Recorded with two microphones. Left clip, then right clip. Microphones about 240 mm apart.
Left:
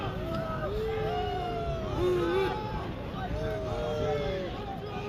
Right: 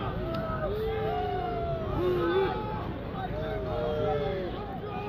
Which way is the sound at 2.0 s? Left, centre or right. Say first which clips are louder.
Right 1 dB; left.